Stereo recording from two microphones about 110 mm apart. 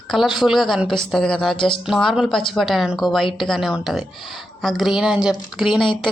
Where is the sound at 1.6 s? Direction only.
45° left (ahead or behind).